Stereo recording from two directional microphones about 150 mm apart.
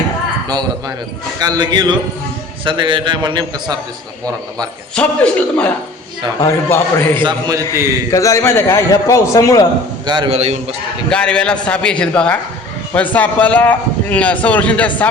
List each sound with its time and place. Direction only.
0.4 s a man's voice: 25° right (ahead or behind)
4.9 s speech: 10° left (ahead or behind)
6.4 s speech: 20° left (ahead or behind)
7.2 s a man's voice: 30° right (ahead or behind)
8.1 s a man's voice: 20° left (ahead or behind)
10.1 s a man's voice: 30° right (ahead or behind)
10.3 s a man's voice: 45° right (ahead or behind)
11.1 s speech: 5° left (ahead or behind)